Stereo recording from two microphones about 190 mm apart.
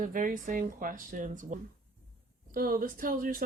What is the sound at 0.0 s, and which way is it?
Speech, 45° right (ahead or behind).